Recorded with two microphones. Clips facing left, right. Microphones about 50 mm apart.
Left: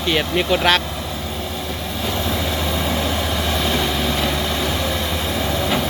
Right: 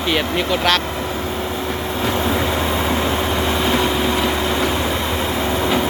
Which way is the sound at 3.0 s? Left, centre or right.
Right.